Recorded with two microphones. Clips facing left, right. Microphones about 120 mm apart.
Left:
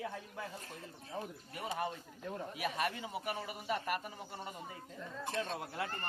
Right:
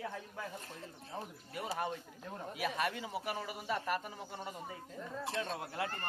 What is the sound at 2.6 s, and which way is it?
Speech, centre (ahead or behind).